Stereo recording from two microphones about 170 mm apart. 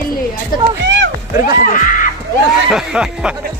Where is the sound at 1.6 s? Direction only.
50° left (ahead or behind).